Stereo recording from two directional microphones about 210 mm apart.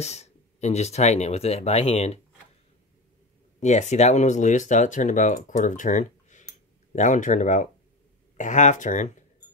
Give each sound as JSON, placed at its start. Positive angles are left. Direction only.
{"t": 0.0, "sound": "speech", "side_deg": 30}
{"t": 3.5, "sound": "speech", "side_deg": 35}